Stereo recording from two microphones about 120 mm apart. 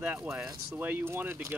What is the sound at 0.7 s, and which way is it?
Speech, 15° right (ahead or behind).